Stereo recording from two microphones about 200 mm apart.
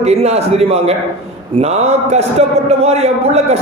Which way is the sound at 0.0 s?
30° right (ahead or behind).